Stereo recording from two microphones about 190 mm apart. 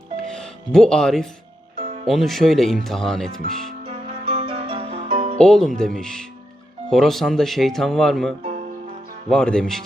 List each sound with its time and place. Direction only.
0.2 s music: 5° left (ahead or behind)
2.0 s speech: centre (ahead or behind)
3.8 s music: 30° right (ahead or behind)
5.4 s speech: centre (ahead or behind)